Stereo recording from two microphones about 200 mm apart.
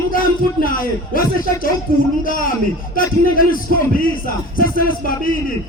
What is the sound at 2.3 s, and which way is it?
A man's voice, 45° left (ahead or behind).